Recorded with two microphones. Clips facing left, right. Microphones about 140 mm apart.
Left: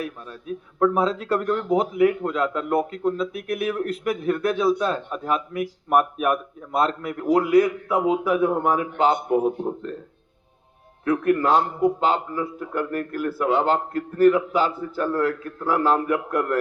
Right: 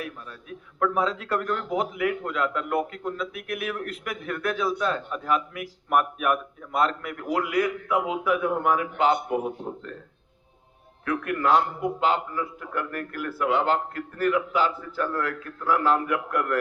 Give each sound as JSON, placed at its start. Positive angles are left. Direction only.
{"t": 0.0, "sound": "speech", "side_deg": 35}
{"t": 11.0, "sound": "speech", "side_deg": 35}